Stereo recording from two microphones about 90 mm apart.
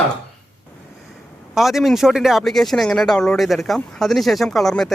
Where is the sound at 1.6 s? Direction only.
Centre (ahead or behind).